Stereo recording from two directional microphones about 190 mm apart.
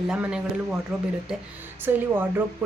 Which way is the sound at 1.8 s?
10° right (ahead or behind).